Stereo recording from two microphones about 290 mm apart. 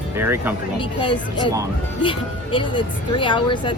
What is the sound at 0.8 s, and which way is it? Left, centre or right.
Speech, centre.